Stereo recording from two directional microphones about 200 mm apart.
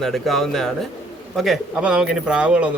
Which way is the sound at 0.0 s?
Centre (ahead or behind).